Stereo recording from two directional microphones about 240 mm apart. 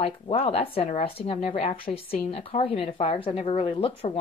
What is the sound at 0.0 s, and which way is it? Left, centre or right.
A woman's voice, left.